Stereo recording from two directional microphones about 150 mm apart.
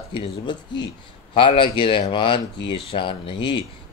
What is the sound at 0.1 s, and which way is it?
Speech, 30° left (ahead or behind).